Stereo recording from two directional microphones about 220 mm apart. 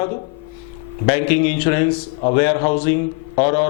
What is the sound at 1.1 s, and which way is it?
A man's voice, 15° left (ahead or behind).